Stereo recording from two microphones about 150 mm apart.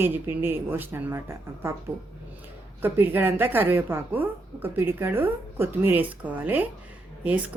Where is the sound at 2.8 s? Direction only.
15° right (ahead or behind).